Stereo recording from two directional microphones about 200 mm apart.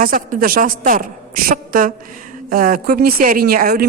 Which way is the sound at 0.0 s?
45° right (ahead or behind).